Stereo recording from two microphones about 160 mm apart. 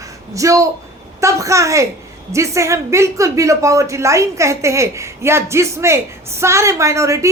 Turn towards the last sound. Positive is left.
turn(degrees=-20)  # may be behind; listen again after turning